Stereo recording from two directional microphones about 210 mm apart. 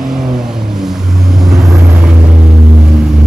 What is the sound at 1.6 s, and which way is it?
Vehicle, 15° right (ahead or behind).